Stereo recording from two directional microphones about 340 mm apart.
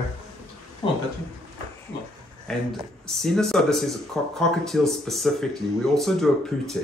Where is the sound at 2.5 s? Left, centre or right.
Centre.